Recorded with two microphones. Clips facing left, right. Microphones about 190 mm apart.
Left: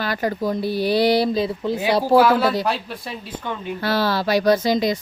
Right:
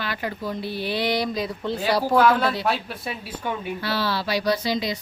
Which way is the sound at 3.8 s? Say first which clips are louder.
Left 9 dB; 45° left (ahead or behind).